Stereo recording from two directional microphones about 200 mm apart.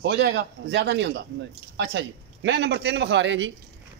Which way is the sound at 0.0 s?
60° right (ahead or behind).